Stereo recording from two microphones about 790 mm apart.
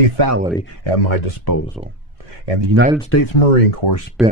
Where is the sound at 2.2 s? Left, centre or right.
Right.